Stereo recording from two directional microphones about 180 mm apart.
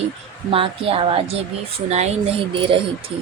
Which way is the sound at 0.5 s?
30° right (ahead or behind).